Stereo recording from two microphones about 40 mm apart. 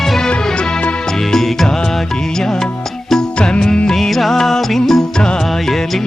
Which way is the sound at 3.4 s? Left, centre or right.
Centre.